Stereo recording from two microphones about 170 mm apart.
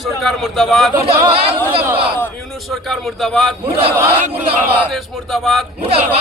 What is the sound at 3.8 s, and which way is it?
Chant, 35° right (ahead or behind).